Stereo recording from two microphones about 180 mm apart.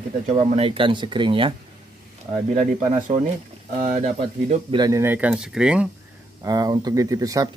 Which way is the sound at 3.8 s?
40° right (ahead or behind).